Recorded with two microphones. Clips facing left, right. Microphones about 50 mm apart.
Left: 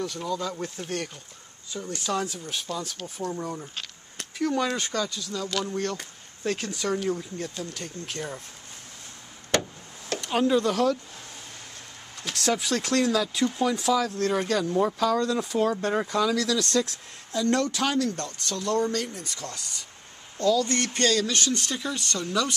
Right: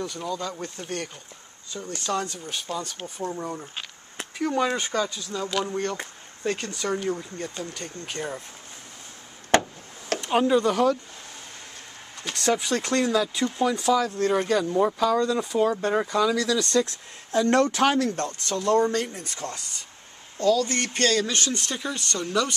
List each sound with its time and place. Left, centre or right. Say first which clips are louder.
0.0 s speech: left 1 dB; centre
2.7 s speech: right 2 dB; right
3.2 s speech: right 1 dB; centre
10.1 s speech: right 2 dB; centre
12.2 s speech: right 2 dB; centre
17.3 s speech: right 4 dB; right
20.6 s speech: even; centre